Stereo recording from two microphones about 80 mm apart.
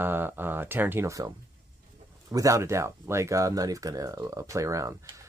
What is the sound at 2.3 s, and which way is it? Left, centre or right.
Speech, right.